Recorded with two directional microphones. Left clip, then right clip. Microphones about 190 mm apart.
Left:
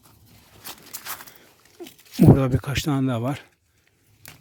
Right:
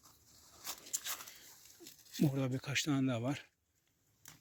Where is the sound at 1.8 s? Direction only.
50° left (ahead or behind).